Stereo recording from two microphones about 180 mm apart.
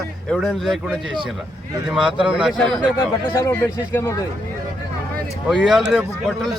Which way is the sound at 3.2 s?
10° left (ahead or behind).